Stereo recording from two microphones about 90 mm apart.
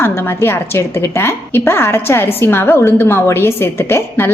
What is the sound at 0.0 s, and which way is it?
A woman's voice, 25° left (ahead or behind).